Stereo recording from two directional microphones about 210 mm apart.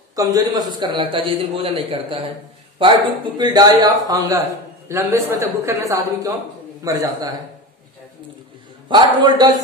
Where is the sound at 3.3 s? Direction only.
20° right (ahead or behind).